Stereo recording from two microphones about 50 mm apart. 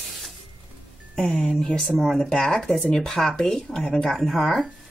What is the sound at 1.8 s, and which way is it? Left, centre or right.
Speech, centre.